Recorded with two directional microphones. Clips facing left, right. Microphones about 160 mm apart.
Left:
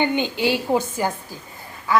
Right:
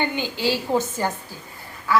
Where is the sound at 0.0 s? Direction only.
20° left (ahead or behind).